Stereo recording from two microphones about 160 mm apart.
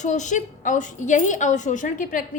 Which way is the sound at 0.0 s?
50° left (ahead or behind).